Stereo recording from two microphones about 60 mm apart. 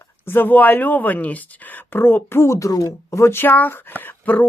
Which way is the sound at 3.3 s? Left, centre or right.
Left.